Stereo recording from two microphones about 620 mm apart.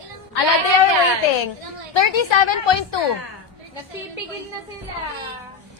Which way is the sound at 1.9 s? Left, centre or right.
Left.